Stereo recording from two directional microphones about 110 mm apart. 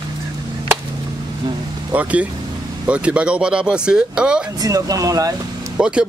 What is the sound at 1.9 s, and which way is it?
Speech, 15° right (ahead or behind).